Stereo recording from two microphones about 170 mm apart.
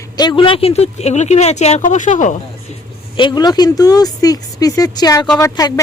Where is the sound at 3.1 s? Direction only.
25° left (ahead or behind).